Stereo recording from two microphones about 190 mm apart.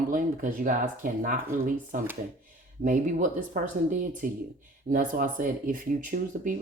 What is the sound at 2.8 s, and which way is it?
Speech, 40° right (ahead or behind).